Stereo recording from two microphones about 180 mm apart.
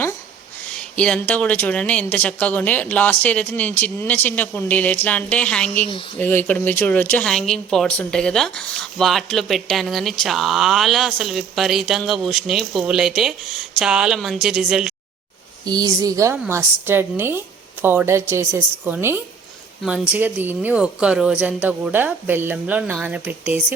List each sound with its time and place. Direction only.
0.7 s speech: 5° left (ahead or behind)
15.6 s a woman's voice: 20° right (ahead or behind)